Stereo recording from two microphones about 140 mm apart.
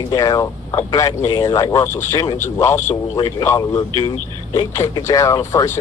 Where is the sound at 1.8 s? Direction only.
20° left (ahead or behind).